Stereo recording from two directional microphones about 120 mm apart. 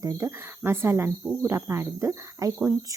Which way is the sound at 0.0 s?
25° right (ahead or behind).